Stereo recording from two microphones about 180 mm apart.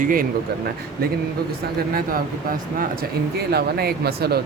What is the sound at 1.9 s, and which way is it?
Speech, 55° right (ahead or behind).